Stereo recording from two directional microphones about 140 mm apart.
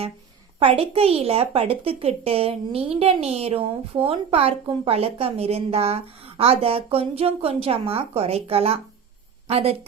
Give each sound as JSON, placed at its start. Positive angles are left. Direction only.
{"t": 0.6, "sound": "speech", "side_deg": -45}